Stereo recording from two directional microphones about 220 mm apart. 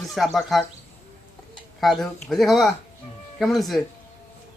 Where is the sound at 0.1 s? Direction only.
Centre (ahead or behind).